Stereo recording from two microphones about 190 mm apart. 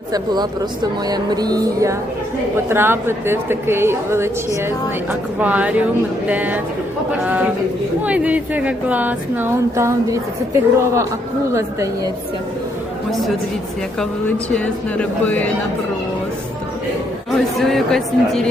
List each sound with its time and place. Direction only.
1.0 s music: 20° right (ahead or behind)
2.6 s speech: 10° right (ahead or behind)
5.4 s speech: 10° right (ahead or behind)
14.5 s speech: 5° left (ahead or behind)
17.3 s speech: centre (ahead or behind)